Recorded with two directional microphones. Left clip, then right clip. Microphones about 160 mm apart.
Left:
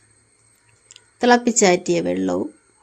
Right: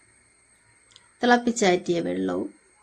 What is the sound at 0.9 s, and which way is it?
Speech, 15° left (ahead or behind).